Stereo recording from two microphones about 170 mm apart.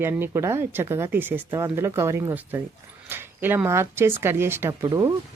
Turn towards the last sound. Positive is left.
turn(degrees=-20)  # may be behind; listen again after turning